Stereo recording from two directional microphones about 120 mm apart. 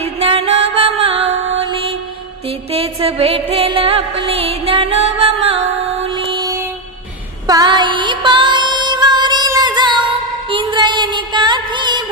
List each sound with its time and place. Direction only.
0.0 s music: 55° right (ahead or behind)
6.1 s music: 40° right (ahead or behind)